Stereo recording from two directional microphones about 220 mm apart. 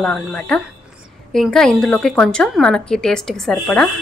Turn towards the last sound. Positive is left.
turn(degrees=5)  # may be behind; listen again after turning